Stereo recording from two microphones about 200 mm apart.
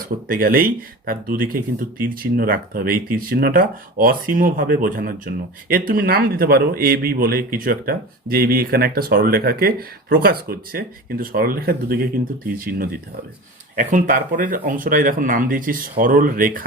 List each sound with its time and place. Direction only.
0.3 s speech: 45° right (ahead or behind)